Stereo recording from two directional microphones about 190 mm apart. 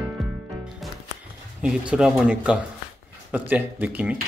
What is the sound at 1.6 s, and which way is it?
Speech, 5° right (ahead or behind).